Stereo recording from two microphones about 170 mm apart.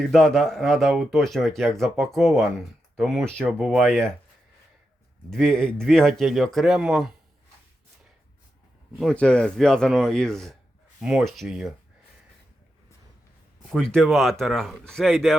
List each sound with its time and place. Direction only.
0.1 s speech: 5° left (ahead or behind)
5.3 s speech: 5° left (ahead or behind)
9.0 s speech: 5° left (ahead or behind)
13.7 s speech: centre (ahead or behind)